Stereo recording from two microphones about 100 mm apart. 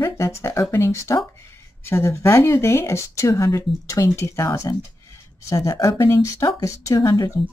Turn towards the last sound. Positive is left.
turn(degrees=40)  # may be behind; listen again after turning